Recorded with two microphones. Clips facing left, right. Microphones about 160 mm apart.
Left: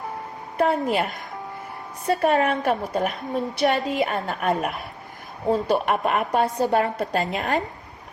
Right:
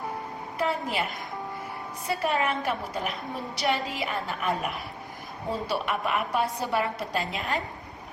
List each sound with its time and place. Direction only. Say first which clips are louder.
0.5 s a woman's voice: left 7 dB; 50° left (ahead or behind)
2.0 s a woman's voice: left 7 dB; 45° left (ahead or behind)